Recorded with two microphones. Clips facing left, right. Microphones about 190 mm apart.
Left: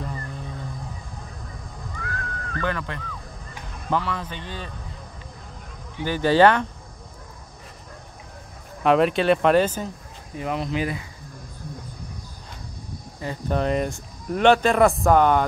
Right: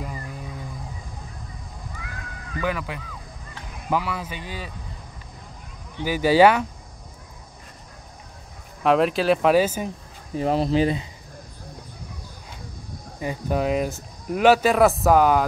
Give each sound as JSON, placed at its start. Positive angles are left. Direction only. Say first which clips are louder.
{"t": 0.0, "sound": "a sound", "louder": "left 1 dB", "side_deg": -10}
{"t": 2.0, "sound": "a sound", "louder": "left 5 dB", "side_deg": -10}
{"t": 3.9, "sound": "speech", "louder": "even", "side_deg": -10}
{"t": 6.0, "sound": "speech", "louder": "right 1 dB", "side_deg": -10}
{"t": 8.8, "sound": "speech", "louder": "left 1 dB", "side_deg": 0}
{"t": 10.3, "sound": "speech", "louder": "right 6 dB", "side_deg": -35}
{"t": 13.2, "sound": "speech", "louder": "right 1 dB", "side_deg": -10}